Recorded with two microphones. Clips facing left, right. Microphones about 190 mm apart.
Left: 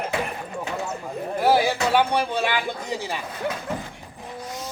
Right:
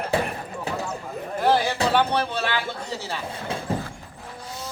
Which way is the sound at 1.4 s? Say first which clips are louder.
Left 2 dB; 10° left (ahead or behind).